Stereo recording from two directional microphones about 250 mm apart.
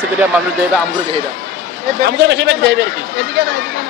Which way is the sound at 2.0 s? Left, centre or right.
Right.